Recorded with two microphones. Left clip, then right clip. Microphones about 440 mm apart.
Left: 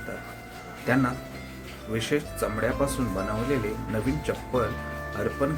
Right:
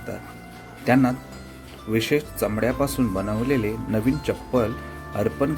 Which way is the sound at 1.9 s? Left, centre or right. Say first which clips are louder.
Right 5 dB; centre.